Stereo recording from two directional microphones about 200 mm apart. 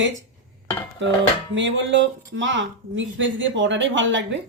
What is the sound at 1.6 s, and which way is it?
Speech, 65° right (ahead or behind).